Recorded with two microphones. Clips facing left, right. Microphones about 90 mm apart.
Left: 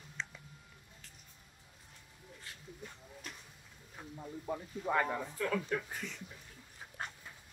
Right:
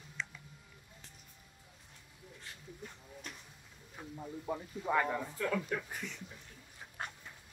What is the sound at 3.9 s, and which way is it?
Speech, 5° right (ahead or behind).